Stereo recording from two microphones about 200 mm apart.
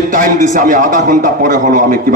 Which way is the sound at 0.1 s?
40° right (ahead or behind).